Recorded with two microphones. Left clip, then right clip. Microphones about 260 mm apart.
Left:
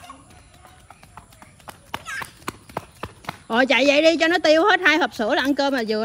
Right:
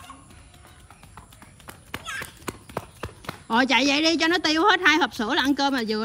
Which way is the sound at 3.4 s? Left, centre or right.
Centre.